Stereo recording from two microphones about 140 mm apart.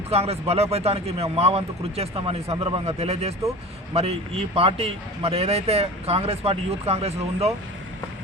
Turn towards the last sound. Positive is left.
turn(degrees=-50)  # may be behind; listen again after turning